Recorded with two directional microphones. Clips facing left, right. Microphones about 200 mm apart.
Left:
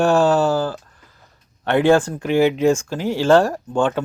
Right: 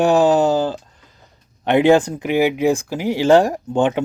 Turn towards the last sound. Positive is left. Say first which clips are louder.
# right 2 dB
turn(degrees=-20)  # may be behind; listen again after turning